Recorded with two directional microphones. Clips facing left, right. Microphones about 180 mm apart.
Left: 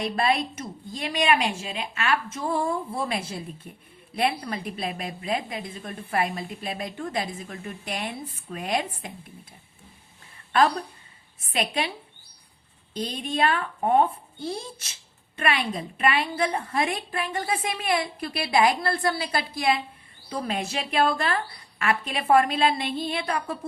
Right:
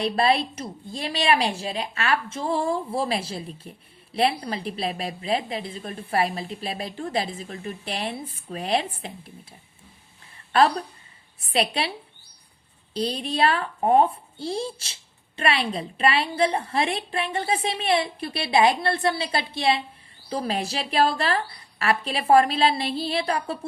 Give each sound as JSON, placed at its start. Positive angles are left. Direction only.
{"t": 0.0, "sound": "a woman's voice", "side_deg": -30}
{"t": 11.5, "sound": "a woman's voice", "side_deg": -30}
{"t": 12.9, "sound": "a woman's voice", "side_deg": -30}